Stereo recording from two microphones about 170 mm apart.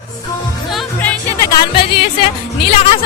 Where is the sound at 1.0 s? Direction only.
15° left (ahead or behind).